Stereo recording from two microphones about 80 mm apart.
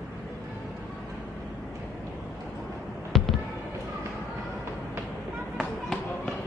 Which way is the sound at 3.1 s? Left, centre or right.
Centre.